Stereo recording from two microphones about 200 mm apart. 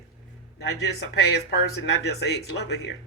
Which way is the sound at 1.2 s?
55° left (ahead or behind).